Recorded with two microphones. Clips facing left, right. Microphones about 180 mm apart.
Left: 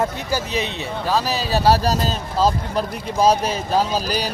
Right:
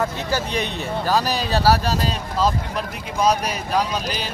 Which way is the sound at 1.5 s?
25° left (ahead or behind).